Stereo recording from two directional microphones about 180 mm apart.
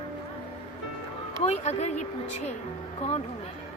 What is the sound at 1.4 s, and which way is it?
Speech, 35° left (ahead or behind).